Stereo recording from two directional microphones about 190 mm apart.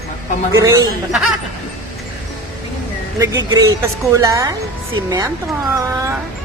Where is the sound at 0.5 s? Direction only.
15° right (ahead or behind).